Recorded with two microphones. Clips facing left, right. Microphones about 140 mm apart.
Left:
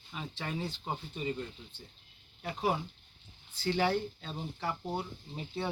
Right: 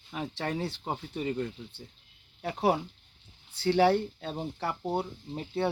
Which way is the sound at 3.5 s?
65° right (ahead or behind).